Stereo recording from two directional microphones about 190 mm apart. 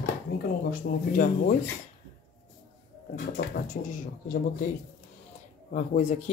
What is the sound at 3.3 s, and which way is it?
Speech, 50° left (ahead or behind).